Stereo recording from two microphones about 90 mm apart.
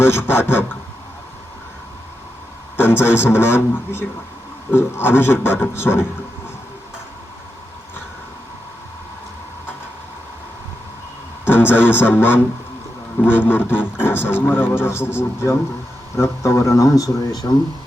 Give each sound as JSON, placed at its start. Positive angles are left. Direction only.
{"t": 0.0, "sound": "speech", "side_deg": 25}
{"t": 2.7, "sound": "a man's voice", "side_deg": 25}
{"t": 11.4, "sound": "speech", "side_deg": 25}